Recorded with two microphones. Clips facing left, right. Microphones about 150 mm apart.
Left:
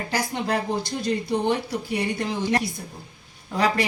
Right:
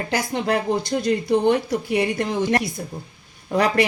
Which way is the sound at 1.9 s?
90° right.